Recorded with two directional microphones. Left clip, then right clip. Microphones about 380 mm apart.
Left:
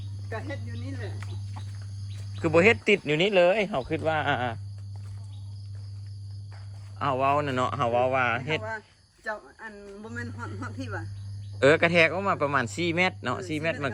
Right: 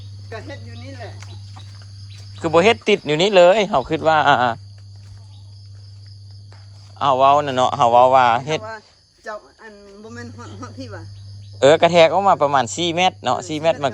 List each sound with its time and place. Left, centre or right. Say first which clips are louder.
2.4 s speech: right 6 dB; centre
7.0 s speech: right 11 dB; centre
9.2 s speech: right 3 dB; centre
11.6 s speech: right 8 dB; right